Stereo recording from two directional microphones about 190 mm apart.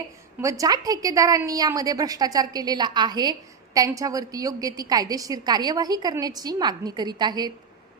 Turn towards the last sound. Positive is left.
turn(degrees=-20)  # may be behind; listen again after turning